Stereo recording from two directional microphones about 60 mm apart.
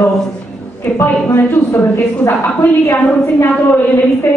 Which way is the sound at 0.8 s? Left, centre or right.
Left.